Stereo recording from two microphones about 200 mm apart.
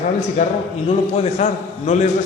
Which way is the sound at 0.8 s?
30° left (ahead or behind).